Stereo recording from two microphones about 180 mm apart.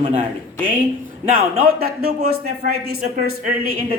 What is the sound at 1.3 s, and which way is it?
A man's voice, 50° right (ahead or behind).